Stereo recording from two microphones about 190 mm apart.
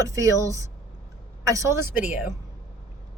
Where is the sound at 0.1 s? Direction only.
15° right (ahead or behind).